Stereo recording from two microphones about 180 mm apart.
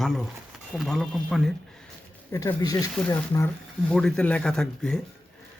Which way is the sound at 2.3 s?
20° left (ahead or behind).